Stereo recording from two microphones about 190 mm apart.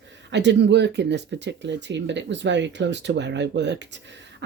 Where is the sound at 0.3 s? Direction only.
65° right (ahead or behind).